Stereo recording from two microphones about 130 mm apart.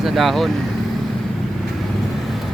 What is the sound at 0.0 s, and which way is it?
Speech, centre (ahead or behind).